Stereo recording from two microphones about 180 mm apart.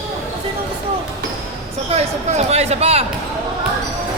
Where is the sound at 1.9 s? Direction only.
35° right (ahead or behind).